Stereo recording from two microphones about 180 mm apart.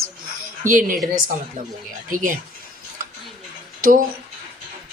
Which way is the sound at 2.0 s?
45° right (ahead or behind).